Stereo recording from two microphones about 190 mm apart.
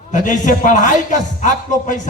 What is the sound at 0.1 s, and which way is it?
A man's voice, 40° left (ahead or behind).